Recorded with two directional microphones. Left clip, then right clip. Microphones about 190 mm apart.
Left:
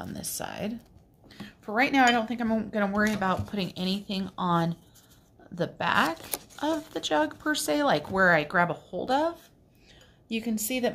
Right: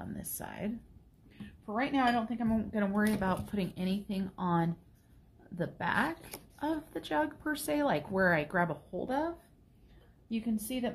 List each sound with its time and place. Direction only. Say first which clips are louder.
0.0 s speech: left 8 dB; 20° left (ahead or behind)
1.7 s speech: left 8 dB; 30° left (ahead or behind)
10.3 s a woman's voice: left 6 dB; 30° left (ahead or behind)